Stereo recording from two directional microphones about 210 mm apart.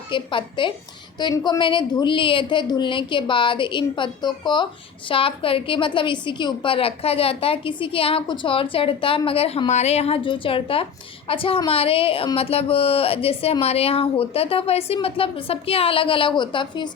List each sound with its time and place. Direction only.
0.1 s a woman's voice: 25° left (ahead or behind)